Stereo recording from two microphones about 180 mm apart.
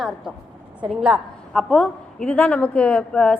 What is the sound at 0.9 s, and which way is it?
A woman's voice, 5° right (ahead or behind).